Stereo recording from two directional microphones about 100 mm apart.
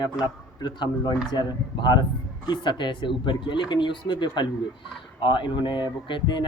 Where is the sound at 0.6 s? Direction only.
50° left (ahead or behind).